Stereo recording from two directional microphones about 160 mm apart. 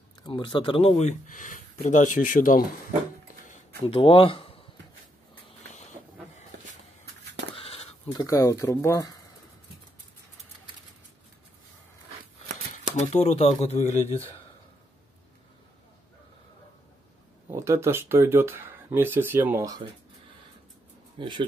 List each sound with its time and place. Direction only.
0.2 s speech: 30° left (ahead or behind); by 2.6 s 55° left (ahead or behind)
3.8 s speech: 35° left (ahead or behind)
7.5 s a sound: 40° left (ahead or behind)
8.1 s speech: 20° left (ahead or behind)
12.9 s speech: 45° left (ahead or behind)
17.5 s speech: 15° right (ahead or behind)
21.2 s speech: 30° right (ahead or behind)